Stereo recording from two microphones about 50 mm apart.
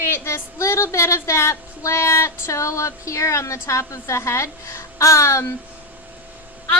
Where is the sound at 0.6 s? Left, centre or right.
Left.